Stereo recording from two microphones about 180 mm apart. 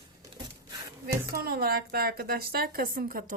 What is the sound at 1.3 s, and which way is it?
A woman's voice, 60° right (ahead or behind).